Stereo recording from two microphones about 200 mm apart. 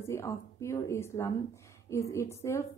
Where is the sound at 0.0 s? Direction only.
15° left (ahead or behind).